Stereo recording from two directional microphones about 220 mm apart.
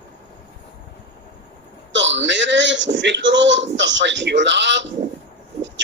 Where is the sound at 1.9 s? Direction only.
55° right (ahead or behind).